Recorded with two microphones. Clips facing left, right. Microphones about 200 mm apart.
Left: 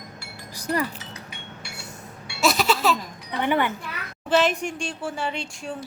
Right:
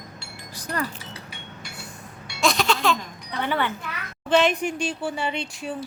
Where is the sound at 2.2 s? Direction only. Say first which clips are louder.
Left 1 dB; 5° left (ahead or behind).